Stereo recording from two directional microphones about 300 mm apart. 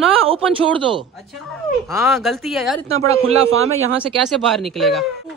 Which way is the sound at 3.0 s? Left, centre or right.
Centre.